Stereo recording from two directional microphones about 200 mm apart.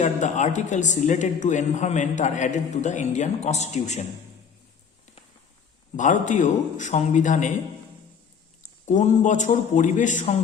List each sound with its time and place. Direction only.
0.0 s speech: 35° left (ahead or behind)
6.0 s speech: 40° left (ahead or behind)
8.9 s speech: 35° left (ahead or behind)